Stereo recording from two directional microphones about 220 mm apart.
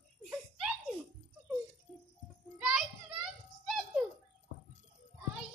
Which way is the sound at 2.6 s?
5° right (ahead or behind).